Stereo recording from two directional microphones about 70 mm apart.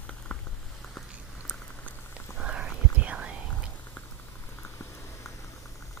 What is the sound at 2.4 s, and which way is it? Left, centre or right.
Whispering, centre.